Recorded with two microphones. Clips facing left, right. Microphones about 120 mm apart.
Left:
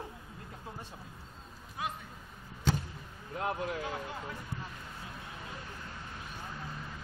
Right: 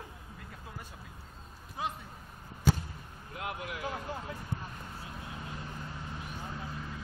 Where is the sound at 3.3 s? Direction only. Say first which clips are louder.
Left 5 dB; 35° left (ahead or behind).